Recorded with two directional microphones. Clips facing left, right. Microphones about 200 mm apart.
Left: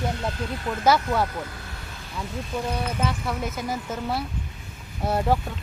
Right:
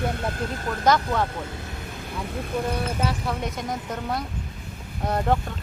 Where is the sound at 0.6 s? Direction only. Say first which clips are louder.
Left 1 dB; 5° left (ahead or behind).